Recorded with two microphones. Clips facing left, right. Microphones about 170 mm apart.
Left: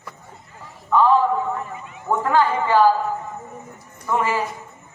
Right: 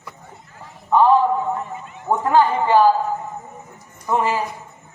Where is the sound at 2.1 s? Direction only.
20° right (ahead or behind).